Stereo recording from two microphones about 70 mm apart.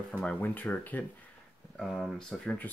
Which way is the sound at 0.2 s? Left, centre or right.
Left.